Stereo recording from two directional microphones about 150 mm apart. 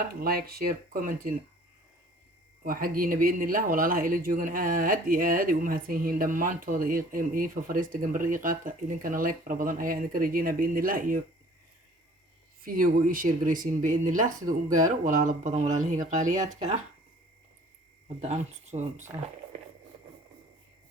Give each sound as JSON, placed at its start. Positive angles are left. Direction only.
{"t": 0.2, "sound": "speech", "side_deg": -90}
{"t": 2.6, "sound": "speech", "side_deg": -75}
{"t": 12.6, "sound": "speech", "side_deg": -70}
{"t": 18.2, "sound": "speech", "side_deg": -50}